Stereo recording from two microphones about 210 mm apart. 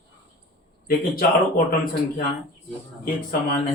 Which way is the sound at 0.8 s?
45° left (ahead or behind).